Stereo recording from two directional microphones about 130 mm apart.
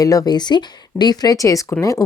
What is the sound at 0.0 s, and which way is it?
A woman's voice, 25° left (ahead or behind).